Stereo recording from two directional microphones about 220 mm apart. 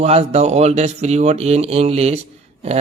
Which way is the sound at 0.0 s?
30° right (ahead or behind).